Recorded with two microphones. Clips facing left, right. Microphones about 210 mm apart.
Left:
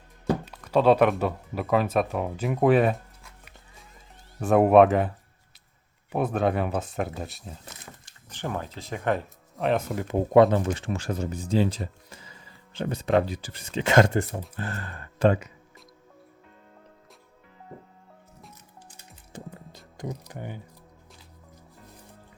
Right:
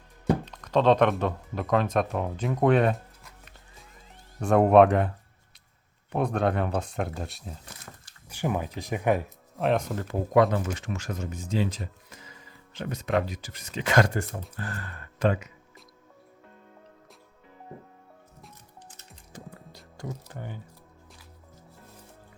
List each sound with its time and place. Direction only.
0.4 s speech: 5° left (ahead or behind)
4.4 s speech: 5° left (ahead or behind)
8.3 s speech: 10° right (ahead or behind)
9.6 s speech: centre (ahead or behind)
10.1 s speech: 25° left (ahead or behind)
19.3 s music: 20° left (ahead or behind)